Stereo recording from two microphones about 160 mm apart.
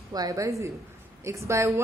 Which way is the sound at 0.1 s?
25° right (ahead or behind).